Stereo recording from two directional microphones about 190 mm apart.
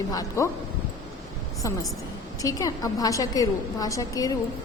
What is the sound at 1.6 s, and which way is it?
A woman's voice, 15° left (ahead or behind).